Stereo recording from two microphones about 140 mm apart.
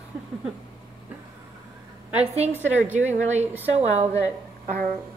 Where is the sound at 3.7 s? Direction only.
50° right (ahead or behind).